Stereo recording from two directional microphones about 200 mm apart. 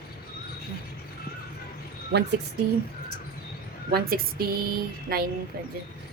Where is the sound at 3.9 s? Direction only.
50° right (ahead or behind).